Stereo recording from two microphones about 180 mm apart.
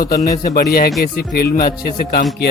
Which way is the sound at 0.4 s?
55° left (ahead or behind).